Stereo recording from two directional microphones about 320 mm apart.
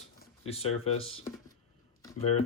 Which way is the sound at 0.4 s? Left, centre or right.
Centre.